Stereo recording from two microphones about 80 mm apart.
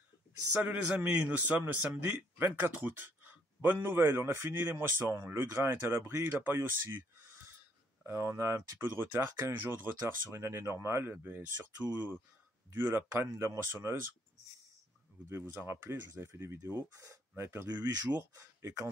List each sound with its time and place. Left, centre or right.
0.9 s speech: centre
8.1 s speech: right
15.6 s speech: right
17.6 s speech: centre